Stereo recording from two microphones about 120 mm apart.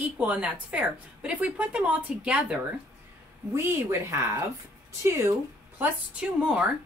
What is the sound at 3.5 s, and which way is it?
Speech, 20° right (ahead or behind).